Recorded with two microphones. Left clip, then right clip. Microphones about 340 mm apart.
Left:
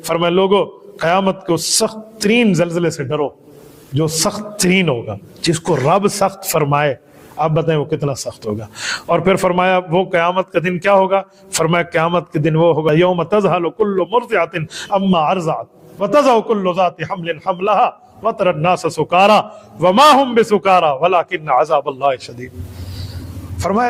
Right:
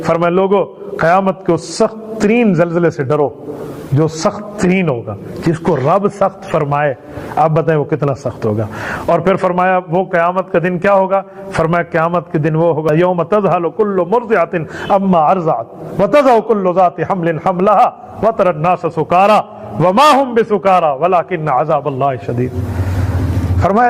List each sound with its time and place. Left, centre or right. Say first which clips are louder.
0.0 s a man's voice: right 2 dB; right
4.6 s a man's voice: even; right
8.8 s a man's voice: right 2 dB; centre; by 12.5 s right
12.5 s a man's voice: even; right
13.9 s a man's voice: right 4 dB; right
23.6 s a man's voice: right 5 dB; right